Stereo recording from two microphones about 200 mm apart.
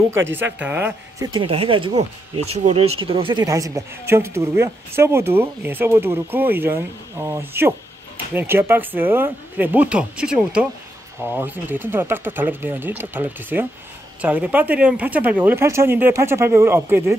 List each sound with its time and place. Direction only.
0.1 s speech: 10° right (ahead or behind)
1.3 s speech: 25° right (ahead or behind); by 17.2 s 10° right (ahead or behind)